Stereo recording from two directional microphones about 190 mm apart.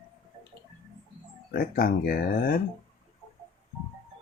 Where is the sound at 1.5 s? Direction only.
50° left (ahead or behind).